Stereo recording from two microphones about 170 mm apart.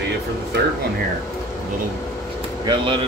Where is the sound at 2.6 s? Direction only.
30° right (ahead or behind).